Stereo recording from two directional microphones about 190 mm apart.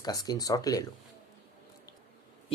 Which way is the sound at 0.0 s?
20° left (ahead or behind).